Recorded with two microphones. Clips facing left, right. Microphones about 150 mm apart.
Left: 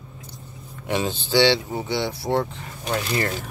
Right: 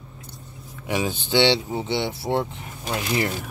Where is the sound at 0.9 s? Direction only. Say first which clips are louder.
Left 1 dB; 10° right (ahead or behind).